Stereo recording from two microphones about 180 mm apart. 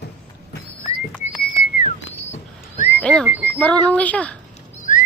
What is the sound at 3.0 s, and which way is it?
Speech, 5° left (ahead or behind).